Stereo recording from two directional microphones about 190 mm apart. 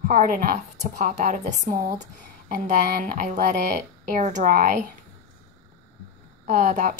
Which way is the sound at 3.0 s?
50° right (ahead or behind).